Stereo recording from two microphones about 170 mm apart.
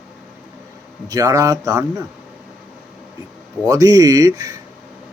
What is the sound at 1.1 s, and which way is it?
Speech, 20° right (ahead or behind).